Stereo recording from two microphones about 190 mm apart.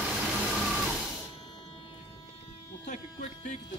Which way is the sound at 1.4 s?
30° left (ahead or behind).